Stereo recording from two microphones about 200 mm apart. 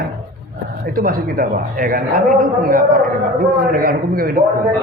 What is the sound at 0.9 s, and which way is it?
A man's voice, 45° right (ahead or behind).